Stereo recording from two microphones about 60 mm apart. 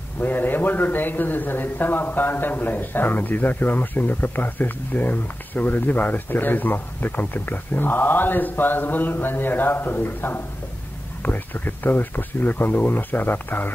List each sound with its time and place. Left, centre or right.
0.2 s a man's voice: left